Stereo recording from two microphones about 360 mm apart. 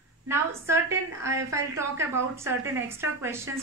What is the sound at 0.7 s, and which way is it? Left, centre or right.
A woman's voice, centre.